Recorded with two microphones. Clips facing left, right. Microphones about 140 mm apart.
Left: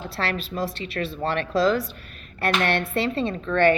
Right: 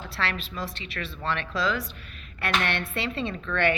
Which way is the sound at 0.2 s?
40° left (ahead or behind).